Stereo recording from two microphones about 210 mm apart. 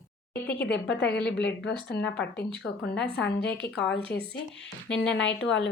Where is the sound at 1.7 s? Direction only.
55° left (ahead or behind).